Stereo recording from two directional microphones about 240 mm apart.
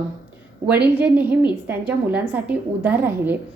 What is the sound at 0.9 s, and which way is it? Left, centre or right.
Speech, centre.